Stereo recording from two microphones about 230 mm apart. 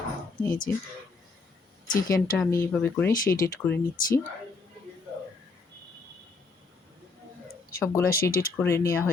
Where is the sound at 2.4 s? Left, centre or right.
Centre.